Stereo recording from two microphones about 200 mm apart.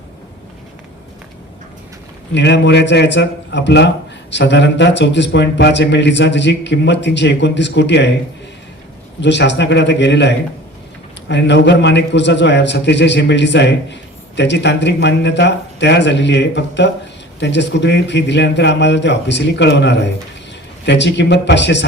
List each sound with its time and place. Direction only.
2.3 s a man's voice: 60° left (ahead or behind)
9.2 s a man's voice: 60° left (ahead or behind)